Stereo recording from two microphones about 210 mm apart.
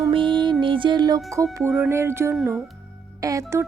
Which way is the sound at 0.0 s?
25° right (ahead or behind).